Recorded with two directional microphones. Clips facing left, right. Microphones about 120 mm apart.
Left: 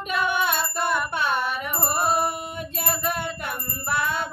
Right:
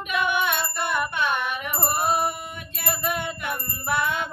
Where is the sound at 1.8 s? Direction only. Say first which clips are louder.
Even; 40° left (ahead or behind).